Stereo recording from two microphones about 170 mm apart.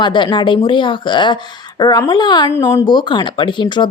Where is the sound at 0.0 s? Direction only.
25° left (ahead or behind).